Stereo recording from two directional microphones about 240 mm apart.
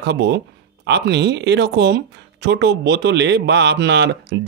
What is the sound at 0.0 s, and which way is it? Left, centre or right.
Speech, right.